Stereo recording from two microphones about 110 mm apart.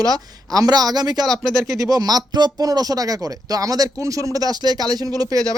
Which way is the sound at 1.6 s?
30° right (ahead or behind).